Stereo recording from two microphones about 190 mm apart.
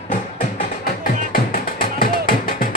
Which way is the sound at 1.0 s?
50° left (ahead or behind).